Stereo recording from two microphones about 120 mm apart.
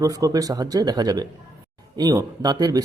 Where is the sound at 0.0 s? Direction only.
30° right (ahead or behind).